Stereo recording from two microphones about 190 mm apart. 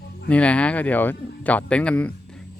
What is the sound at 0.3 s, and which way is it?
Speech, 5° left (ahead or behind).